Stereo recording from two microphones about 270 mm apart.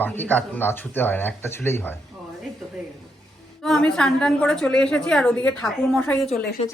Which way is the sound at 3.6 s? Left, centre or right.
Centre.